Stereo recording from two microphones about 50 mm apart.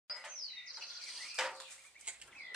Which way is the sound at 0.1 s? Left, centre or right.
Centre.